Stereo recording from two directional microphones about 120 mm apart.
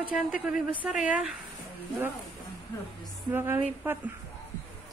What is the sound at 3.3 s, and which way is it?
Speech, 20° right (ahead or behind).